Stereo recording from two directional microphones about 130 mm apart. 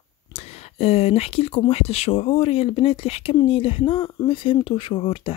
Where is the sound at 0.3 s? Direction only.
50° left (ahead or behind).